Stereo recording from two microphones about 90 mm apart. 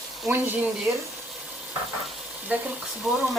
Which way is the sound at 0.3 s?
20° right (ahead or behind).